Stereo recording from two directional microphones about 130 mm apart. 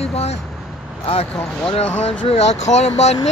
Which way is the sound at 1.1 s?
45° left (ahead or behind).